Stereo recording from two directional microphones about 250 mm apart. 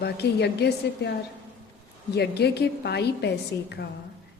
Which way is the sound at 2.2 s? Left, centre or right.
Left.